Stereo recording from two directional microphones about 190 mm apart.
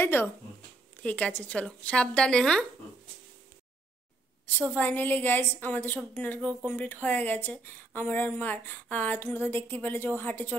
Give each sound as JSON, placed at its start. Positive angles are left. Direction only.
{"t": 0.0, "sound": "a woman's voice", "side_deg": 10}
{"t": 4.7, "sound": "a woman's voice", "side_deg": 10}